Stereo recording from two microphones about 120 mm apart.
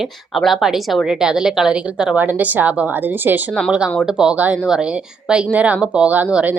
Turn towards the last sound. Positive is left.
turn(degrees=-10)  # may be behind; listen again after turning